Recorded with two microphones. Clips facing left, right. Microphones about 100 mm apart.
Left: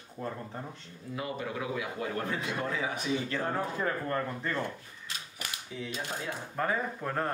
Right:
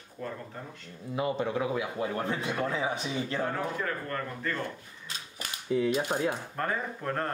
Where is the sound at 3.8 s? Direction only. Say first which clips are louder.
Left 2 dB; 25° left (ahead or behind).